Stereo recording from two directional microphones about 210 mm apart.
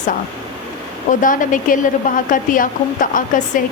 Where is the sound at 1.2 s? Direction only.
40° left (ahead or behind).